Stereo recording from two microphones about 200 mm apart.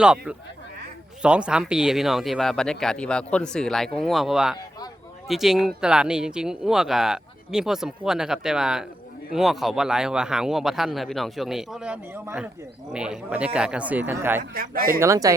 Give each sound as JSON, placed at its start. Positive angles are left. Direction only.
{"t": 0.0, "sound": "speech", "side_deg": -5}
{"t": 14.5, "sound": "speech", "side_deg": -45}
{"t": 15.0, "sound": "speech", "side_deg": -15}